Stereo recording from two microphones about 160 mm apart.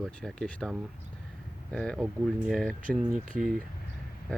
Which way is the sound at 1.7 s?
5° left (ahead or behind).